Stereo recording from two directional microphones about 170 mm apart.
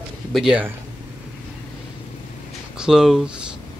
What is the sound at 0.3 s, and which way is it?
Speech, 5° right (ahead or behind).